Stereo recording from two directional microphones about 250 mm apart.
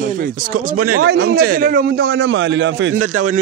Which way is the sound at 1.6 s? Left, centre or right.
Right.